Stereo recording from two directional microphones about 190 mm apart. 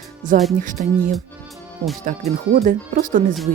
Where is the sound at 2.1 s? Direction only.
40° right (ahead or behind).